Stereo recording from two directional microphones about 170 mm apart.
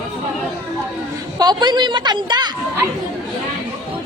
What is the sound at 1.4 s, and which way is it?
A woman's voice, 25° right (ahead or behind).